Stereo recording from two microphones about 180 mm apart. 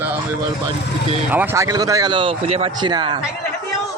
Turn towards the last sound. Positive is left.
turn(degrees=-25)  # may be behind; listen again after turning